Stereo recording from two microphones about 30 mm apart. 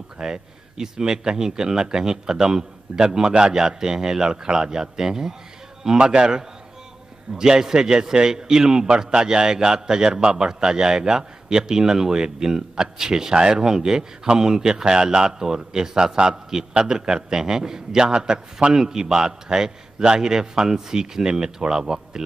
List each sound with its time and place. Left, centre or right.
0.2 s a man's voice: centre